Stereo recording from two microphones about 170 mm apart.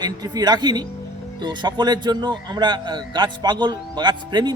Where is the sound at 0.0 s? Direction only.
25° right (ahead or behind).